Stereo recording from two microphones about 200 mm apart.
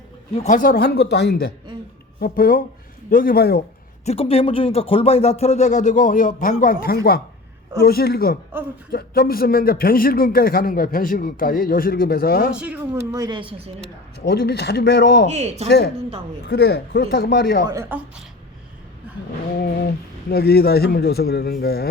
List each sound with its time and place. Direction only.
0.3 s a man's voice: 40° left (ahead or behind)
4.0 s a man's voice: 30° left (ahead or behind); by 12.5 s 50° left (ahead or behind)
12.5 s speech: 5° right (ahead or behind)
13.1 s speech: 20° right (ahead or behind)
14.3 s a man's voice: 55° left (ahead or behind)
15.3 s speech: 35° right (ahead or behind)
16.5 s a man's voice: 55° left (ahead or behind)
17.7 s a woman's voice: 10° right (ahead or behind)
20.3 s a man's voice: 50° left (ahead or behind)